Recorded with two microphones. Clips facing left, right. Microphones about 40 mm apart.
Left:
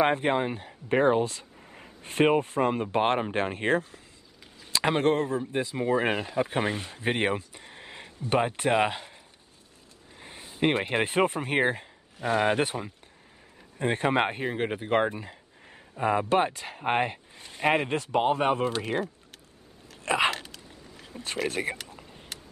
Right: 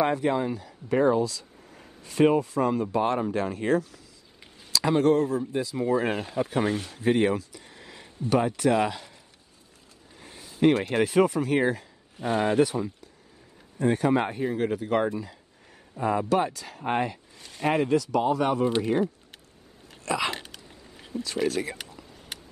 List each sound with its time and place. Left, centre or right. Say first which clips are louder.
0.0 s speech: even; left
7.0 s speech: right 4 dB; left
20.1 s speech: left 3 dB; left
20.3 s hiccup: even; centre
21.2 s speech: right 3 dB; left